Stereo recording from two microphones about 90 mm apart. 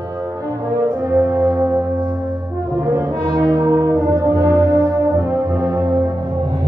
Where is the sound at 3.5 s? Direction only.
40° right (ahead or behind).